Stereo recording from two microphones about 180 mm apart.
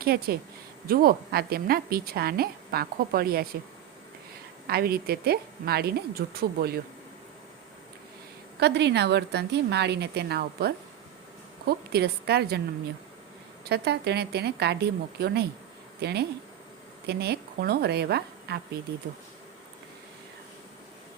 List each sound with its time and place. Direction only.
0.0 s a woman's voice: 60° right (ahead or behind)
4.6 s a woman's voice: 60° right (ahead or behind)
8.6 s a woman's voice: 70° right (ahead or behind)
13.7 s a woman's voice: 65° right (ahead or behind)